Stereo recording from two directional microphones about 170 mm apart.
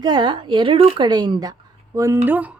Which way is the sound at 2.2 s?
10° right (ahead or behind).